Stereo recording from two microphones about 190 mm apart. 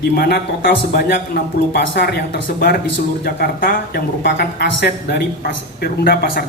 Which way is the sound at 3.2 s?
55° left (ahead or behind).